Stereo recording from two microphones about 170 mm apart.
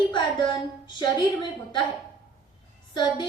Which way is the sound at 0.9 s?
25° left (ahead or behind).